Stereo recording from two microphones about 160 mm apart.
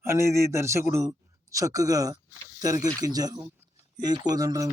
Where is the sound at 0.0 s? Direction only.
15° right (ahead or behind).